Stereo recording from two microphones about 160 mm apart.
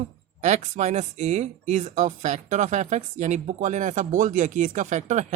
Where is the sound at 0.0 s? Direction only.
45° right (ahead or behind).